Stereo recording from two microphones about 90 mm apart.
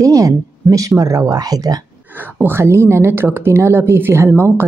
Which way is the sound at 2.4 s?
30° right (ahead or behind).